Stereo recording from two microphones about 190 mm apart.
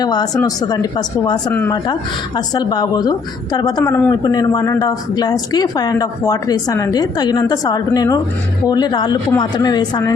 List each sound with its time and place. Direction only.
0.0 s speech: 20° left (ahead or behind)